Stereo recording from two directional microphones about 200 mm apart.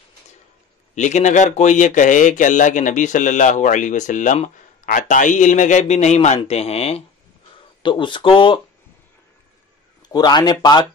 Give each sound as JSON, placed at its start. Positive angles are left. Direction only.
{"t": 0.9, "sound": "speech", "side_deg": 35}
{"t": 10.0, "sound": "speech", "side_deg": 20}